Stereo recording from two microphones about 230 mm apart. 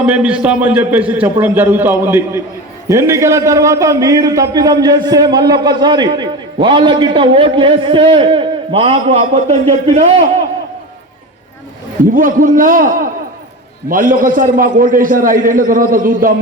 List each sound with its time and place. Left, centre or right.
0.0 s a man's voice: centre; by 10.2 s right
12.1 s a man's voice: right